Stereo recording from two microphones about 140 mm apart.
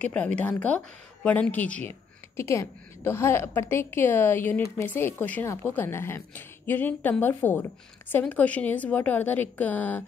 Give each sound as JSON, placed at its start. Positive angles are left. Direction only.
{"t": 0.0, "sound": "speech", "side_deg": 10}